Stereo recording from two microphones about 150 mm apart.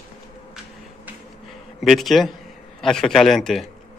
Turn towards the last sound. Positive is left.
turn(degrees=0)  # may be behind; listen again after turning